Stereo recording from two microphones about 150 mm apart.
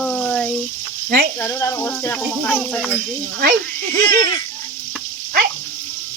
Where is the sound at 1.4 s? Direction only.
15° left (ahead or behind).